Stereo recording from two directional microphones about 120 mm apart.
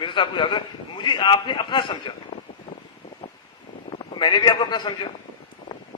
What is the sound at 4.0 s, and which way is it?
A man's voice, 40° left (ahead or behind).